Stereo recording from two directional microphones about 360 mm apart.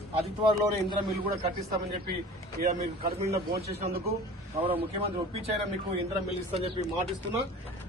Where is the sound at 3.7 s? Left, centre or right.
Right.